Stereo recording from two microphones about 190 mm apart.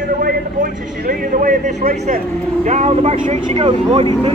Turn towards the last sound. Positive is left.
turn(degrees=-30)  # may be behind; listen again after turning